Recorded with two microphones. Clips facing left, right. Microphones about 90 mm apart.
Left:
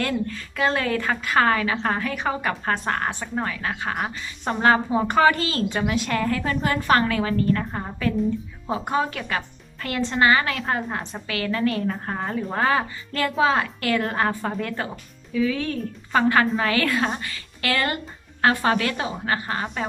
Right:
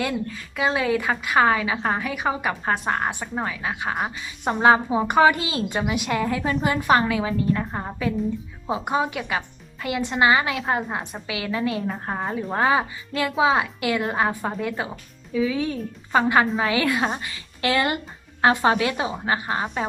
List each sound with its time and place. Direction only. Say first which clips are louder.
0.0 s a woman's voice: left 1 dB; 10° right (ahead or behind)